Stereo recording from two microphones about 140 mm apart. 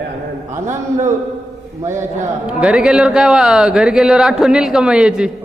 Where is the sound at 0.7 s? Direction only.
20° right (ahead or behind).